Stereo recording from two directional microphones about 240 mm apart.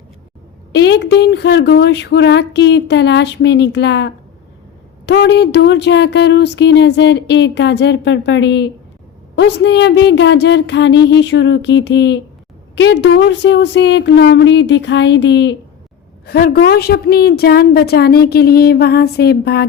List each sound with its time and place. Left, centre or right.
0.7 s a woman's voice: left